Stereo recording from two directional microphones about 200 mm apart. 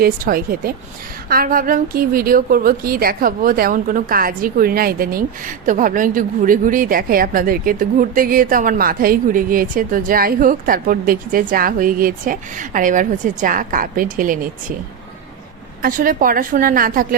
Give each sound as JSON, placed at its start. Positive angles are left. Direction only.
{"t": 0.0, "sound": "a woman's voice", "side_deg": -45}
{"t": 15.8, "sound": "a woman's voice", "side_deg": -45}